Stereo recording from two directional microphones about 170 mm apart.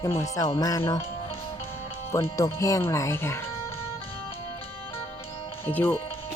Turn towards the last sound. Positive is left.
turn(degrees=10)  # may be behind; listen again after turning